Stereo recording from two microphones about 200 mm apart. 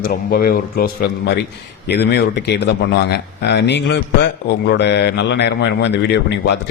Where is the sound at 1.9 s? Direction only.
55° left (ahead or behind).